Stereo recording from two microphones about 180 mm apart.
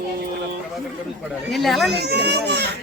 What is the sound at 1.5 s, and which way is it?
Speech, centre (ahead or behind).